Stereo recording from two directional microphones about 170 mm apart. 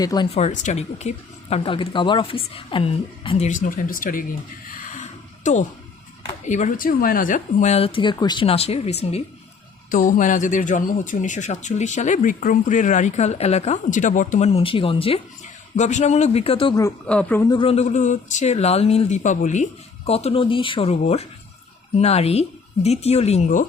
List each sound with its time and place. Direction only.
0.0 s a man's voice: 20° left (ahead or behind)
0.3 s speech: 45° left (ahead or behind)
9.9 s speech: 50° left (ahead or behind); by 15.2 s 35° left (ahead or behind)
15.7 s speech: 45° left (ahead or behind)
17.1 s speech: 10° left (ahead or behind)
17.4 s a man's voice: 25° left (ahead or behind)
17.7 s speech: 40° left (ahead or behind)